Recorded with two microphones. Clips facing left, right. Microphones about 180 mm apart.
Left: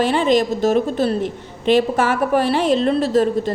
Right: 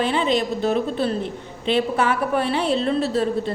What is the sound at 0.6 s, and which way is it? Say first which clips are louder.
Speech: left 4 dB; 45° left (ahead or behind).